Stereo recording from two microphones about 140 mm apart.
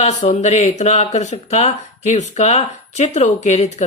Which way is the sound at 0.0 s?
60° left (ahead or behind).